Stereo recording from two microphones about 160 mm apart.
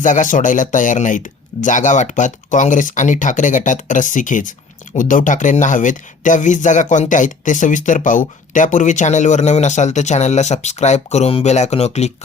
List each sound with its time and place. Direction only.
0.0 s speech: 55° left (ahead or behind)